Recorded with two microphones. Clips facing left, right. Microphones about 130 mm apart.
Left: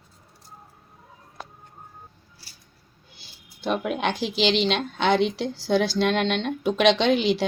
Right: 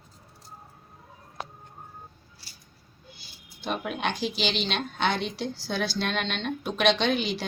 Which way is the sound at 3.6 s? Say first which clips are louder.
Left 5 dB; 90° left.